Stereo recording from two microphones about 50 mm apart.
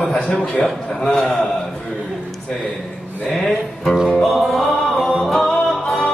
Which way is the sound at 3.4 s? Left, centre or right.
Centre.